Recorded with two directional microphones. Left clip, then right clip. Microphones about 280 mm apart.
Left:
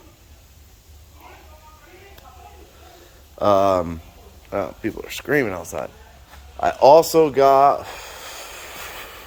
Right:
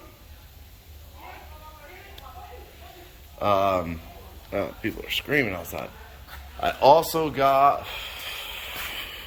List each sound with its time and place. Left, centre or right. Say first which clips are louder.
3.3 s speech: left 6 dB; left
4.5 s speech: left 4 dB; centre
6.7 s speech: left 6 dB; left